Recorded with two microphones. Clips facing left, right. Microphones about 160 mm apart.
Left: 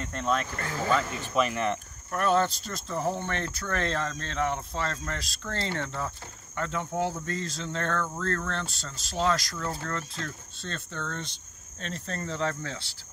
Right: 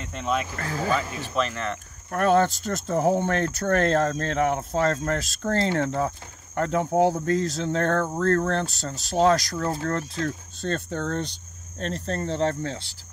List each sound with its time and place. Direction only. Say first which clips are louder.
0.0 s speech: right 1 dB; 5° right (ahead or behind)
1.3 s speech: left 1 dB; 10° left (ahead or behind)
2.0 s speech: right 5 dB; 50° right (ahead or behind); by 12.8 s 30° right (ahead or behind)